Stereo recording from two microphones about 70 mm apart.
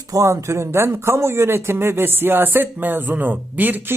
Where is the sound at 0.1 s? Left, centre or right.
Right.